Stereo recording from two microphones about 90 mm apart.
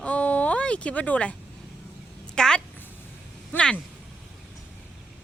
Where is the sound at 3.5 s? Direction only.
10° left (ahead or behind).